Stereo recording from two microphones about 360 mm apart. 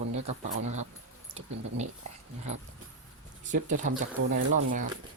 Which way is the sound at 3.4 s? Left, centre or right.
Right.